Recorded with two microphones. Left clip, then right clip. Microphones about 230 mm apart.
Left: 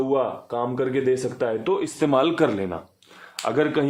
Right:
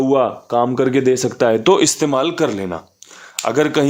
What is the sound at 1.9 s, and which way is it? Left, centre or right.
Speech, centre.